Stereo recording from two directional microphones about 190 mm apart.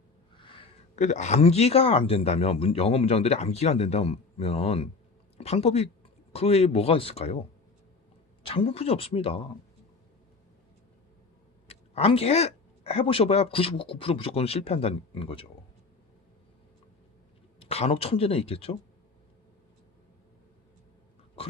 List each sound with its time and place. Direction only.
0.3 s a sound: 25° left (ahead or behind)
0.9 s speech: 40° left (ahead or behind)
8.4 s speech: 30° left (ahead or behind)
11.7 s speech: 30° left (ahead or behind)
17.6 s speech: 30° left (ahead or behind)